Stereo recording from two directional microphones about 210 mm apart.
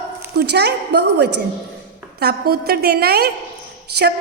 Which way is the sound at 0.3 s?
50° right (ahead or behind).